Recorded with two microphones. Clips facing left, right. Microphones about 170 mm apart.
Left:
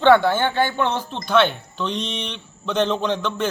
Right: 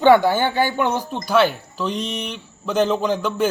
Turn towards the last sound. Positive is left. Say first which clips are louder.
# right 2 dB
turn(degrees=-10)  # may be behind; listen again after turning